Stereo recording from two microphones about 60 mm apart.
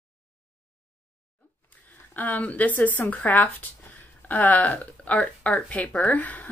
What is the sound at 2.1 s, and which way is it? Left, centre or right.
A woman's voice, left.